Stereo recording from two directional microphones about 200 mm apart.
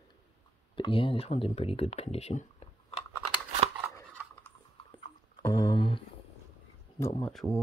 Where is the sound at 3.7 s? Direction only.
10° right (ahead or behind).